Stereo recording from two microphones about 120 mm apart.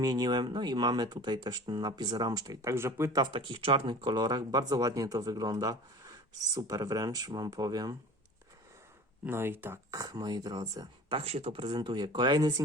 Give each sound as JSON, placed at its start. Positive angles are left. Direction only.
{"t": 0.0, "sound": "speech", "side_deg": -35}
{"t": 3.2, "sound": "speech", "side_deg": -45}
{"t": 9.2, "sound": "speech", "side_deg": -20}
{"t": 10.0, "sound": "speech", "side_deg": -30}
{"t": 11.2, "sound": "speech", "side_deg": -55}